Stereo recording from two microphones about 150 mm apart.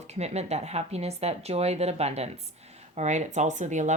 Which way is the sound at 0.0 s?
45° right (ahead or behind).